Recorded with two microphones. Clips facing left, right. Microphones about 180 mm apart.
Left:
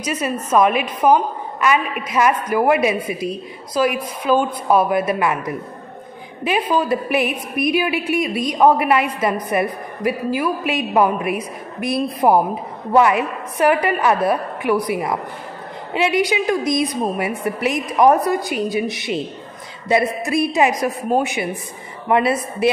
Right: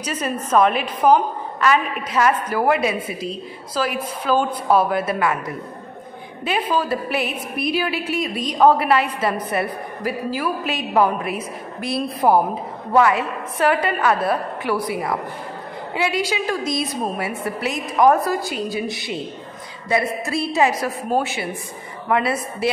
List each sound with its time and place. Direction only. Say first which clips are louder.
0.0 s a woman's voice: left 2 dB; 10° left (ahead or behind)